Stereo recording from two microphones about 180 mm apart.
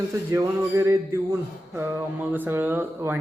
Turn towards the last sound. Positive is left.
turn(degrees=-15)  # may be behind; listen again after turning